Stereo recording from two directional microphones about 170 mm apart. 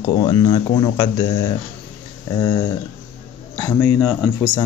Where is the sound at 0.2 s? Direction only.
25° left (ahead or behind).